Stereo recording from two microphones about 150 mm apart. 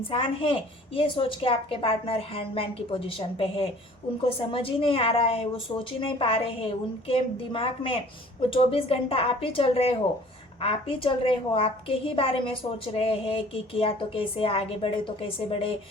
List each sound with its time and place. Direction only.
0.1 s a woman's voice: 35° left (ahead or behind)